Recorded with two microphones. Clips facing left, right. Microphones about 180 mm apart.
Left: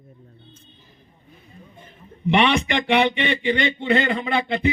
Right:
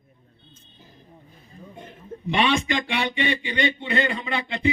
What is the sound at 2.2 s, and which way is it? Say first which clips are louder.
Speech: left 3 dB; 70° left (ahead or behind).